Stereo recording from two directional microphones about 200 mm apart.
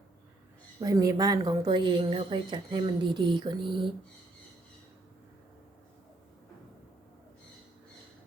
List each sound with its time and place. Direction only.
0.8 s a woman's voice: 15° right (ahead or behind)